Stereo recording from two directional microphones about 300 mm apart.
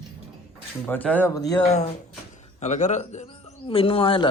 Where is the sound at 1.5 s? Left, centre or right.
Centre.